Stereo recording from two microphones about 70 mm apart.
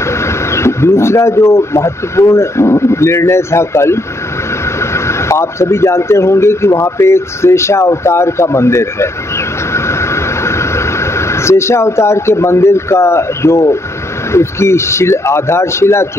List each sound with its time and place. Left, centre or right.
0.0 s speech: left
9.8 s vehicle: left
14.3 s speech: left